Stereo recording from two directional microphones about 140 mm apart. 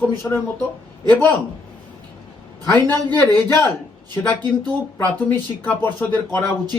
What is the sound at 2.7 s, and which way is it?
Speech, 30° right (ahead or behind).